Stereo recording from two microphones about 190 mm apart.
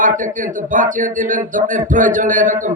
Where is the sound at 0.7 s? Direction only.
45° right (ahead or behind).